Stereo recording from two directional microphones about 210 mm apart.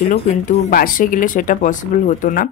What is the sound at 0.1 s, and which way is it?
Speech, 45° left (ahead or behind).